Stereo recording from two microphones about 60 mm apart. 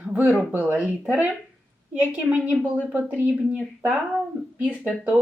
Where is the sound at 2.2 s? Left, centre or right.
Right.